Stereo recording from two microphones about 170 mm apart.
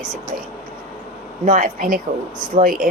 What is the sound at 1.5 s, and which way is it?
A woman's voice, 50° right (ahead or behind).